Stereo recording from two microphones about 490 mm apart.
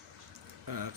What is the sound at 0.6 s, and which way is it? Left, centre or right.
Speech, right.